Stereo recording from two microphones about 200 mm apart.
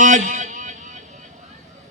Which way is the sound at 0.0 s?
40° right (ahead or behind).